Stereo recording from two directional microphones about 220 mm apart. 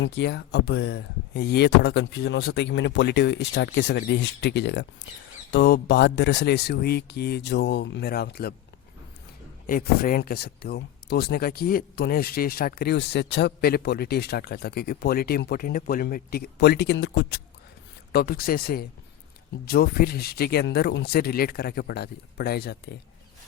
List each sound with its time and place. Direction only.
0.0 s speech: 50° left (ahead or behind)
9.6 s speech: 40° left (ahead or behind)